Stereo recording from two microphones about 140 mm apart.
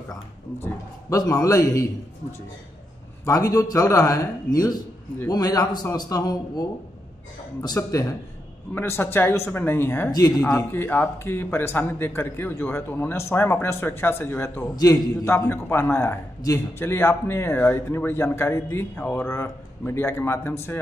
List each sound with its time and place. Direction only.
1.1 s a man's voice: 25° left (ahead or behind)
3.3 s a man's voice: 25° left (ahead or behind)
10.1 s a man's voice: 25° left (ahead or behind)